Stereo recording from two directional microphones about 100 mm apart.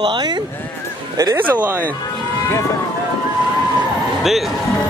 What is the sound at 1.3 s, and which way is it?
Speech, 15° right (ahead or behind).